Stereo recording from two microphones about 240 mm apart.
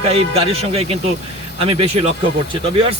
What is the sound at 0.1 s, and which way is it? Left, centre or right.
Speech, right.